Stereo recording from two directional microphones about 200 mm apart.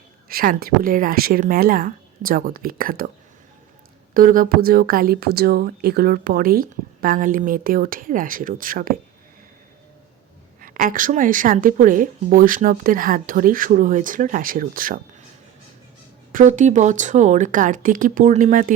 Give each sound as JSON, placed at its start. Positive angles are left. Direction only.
{"t": 0.3, "sound": "speech", "side_deg": -50}
{"t": 4.1, "sound": "speech", "side_deg": -45}
{"t": 10.6, "sound": "speech", "side_deg": -45}
{"t": 16.3, "sound": "speech", "side_deg": -40}